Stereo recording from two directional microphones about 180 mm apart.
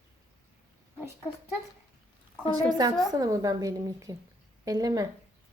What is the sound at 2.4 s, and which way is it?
A woman's voice, 20° right (ahead or behind).